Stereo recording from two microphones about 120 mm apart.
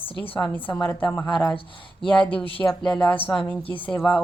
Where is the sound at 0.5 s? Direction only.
15° left (ahead or behind).